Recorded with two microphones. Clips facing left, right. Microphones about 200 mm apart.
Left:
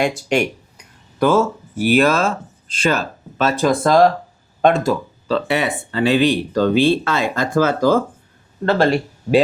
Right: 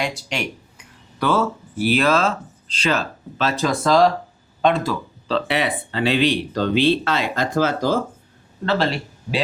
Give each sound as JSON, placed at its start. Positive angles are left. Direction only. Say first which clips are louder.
{"t": 0.0, "sound": "speech", "louder": "left 8 dB", "side_deg": 50}